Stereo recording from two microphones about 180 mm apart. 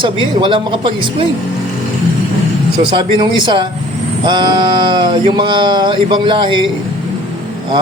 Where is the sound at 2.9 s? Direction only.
25° right (ahead or behind).